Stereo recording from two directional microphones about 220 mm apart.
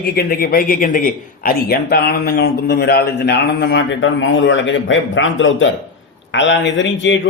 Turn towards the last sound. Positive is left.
turn(degrees=55)  # may be behind; listen again after turning